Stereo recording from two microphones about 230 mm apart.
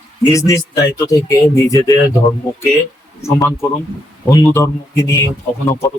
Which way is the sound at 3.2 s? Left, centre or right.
Centre.